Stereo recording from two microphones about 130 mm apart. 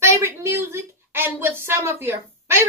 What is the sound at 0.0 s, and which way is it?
A woman's voice, 20° right (ahead or behind).